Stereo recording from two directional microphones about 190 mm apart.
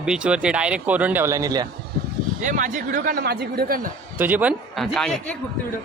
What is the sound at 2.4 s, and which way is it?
Speech, 45° right (ahead or behind).